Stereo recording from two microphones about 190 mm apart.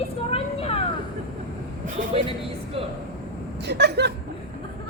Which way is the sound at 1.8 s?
45° right (ahead or behind).